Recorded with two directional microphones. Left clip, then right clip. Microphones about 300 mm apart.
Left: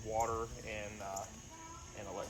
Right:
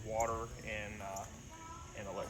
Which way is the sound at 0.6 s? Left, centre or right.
Left.